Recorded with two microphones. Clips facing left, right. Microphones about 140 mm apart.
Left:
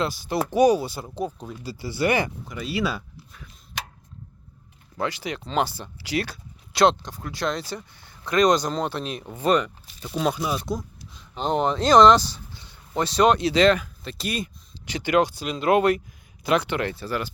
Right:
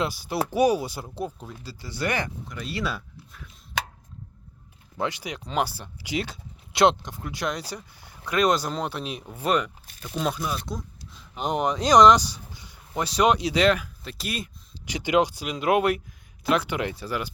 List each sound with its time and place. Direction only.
0.0 s speech: 10° right (ahead or behind)
1.4 s speech: 10° left (ahead or behind)
4.9 s speech: 15° right (ahead or behind)
10.1 s speech: 5° left (ahead or behind)
11.3 s speech: 10° right (ahead or behind)
14.8 s speech: 15° right (ahead or behind)